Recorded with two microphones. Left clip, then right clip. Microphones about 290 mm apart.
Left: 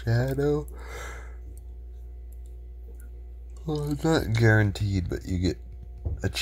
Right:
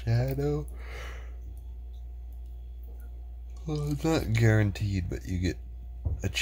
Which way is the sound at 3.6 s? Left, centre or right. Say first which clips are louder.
Left 3 dB; centre.